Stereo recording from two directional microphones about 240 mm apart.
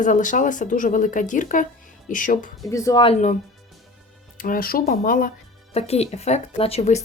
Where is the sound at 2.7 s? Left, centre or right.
Centre.